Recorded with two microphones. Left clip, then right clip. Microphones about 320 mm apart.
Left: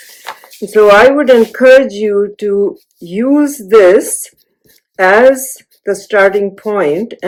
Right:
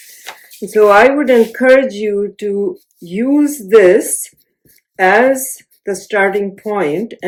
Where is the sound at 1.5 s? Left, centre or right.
Centre.